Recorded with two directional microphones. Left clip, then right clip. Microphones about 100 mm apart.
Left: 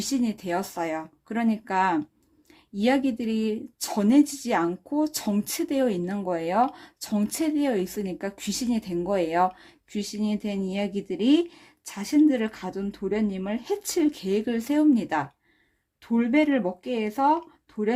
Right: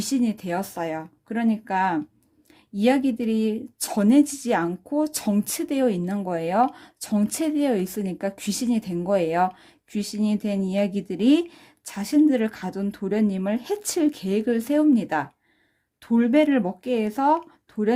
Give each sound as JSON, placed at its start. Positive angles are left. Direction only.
{"t": 0.0, "sound": "speech", "side_deg": -25}
{"t": 16.0, "sound": "speech", "side_deg": -40}